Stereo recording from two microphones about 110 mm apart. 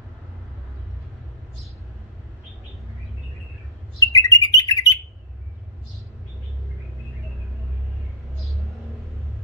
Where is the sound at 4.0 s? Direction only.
30° left (ahead or behind).